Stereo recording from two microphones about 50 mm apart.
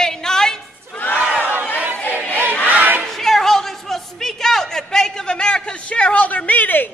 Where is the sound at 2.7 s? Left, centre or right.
Right.